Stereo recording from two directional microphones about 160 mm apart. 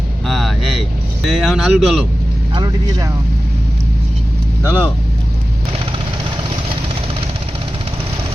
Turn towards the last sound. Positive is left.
turn(degrees=-30)  # may be behind; listen again after turning